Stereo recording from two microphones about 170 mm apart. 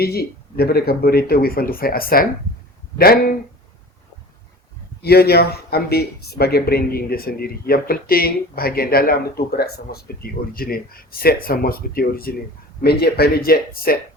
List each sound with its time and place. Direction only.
0.0 s speech: 65° left (ahead or behind)
5.0 s speech: 70° left (ahead or behind)